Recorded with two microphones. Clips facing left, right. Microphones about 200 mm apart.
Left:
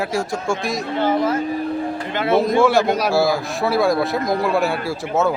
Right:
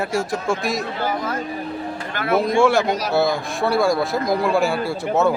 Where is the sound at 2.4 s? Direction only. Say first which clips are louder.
Even; centre (ahead or behind).